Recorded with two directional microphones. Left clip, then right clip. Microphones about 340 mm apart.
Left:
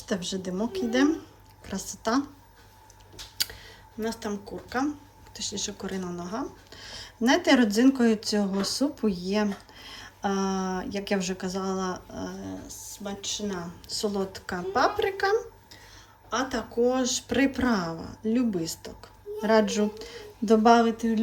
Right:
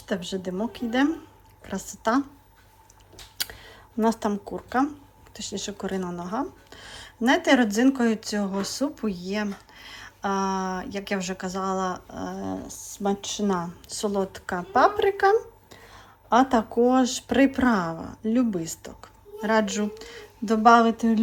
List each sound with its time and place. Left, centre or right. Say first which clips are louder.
0.1 s speech: right 2 dB; centre
3.3 s speech: left 1 dB; centre